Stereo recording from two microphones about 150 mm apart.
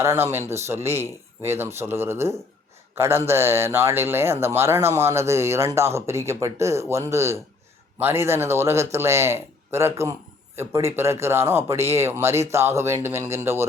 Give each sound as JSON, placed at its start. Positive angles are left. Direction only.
{"t": 0.0, "sound": "speech", "side_deg": -15}